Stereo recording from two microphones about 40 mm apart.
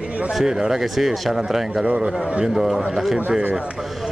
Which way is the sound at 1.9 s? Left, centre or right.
Right.